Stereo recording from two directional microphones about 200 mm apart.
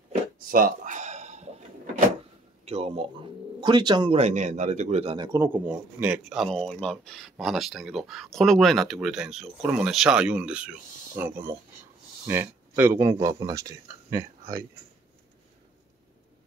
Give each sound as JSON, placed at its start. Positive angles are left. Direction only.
{"t": 0.1, "sound": "a sound", "side_deg": -45}
{"t": 2.6, "sound": "speech", "side_deg": -30}
{"t": 5.1, "sound": "a man's voice", "side_deg": -20}